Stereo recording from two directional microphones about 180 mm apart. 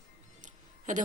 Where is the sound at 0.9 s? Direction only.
45° right (ahead or behind).